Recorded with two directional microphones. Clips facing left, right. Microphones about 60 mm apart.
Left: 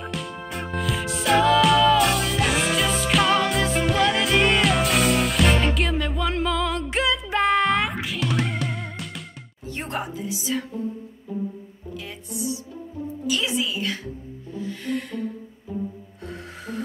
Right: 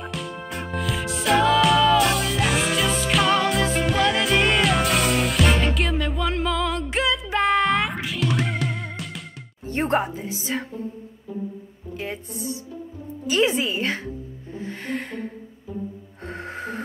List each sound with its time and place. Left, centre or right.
0.0 s music: centre
9.7 s music: right
12.0 s music: right
13.3 s a woman's voice: right
14.5 s music: right
16.3 s music: right